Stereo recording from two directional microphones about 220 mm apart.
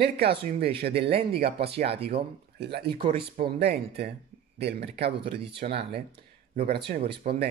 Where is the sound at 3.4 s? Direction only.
45° right (ahead or behind).